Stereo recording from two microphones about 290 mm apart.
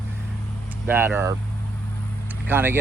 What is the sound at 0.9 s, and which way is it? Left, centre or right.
Speech, centre.